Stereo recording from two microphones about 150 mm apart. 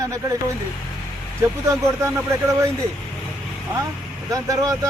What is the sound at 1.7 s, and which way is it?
Speech, 20° right (ahead or behind).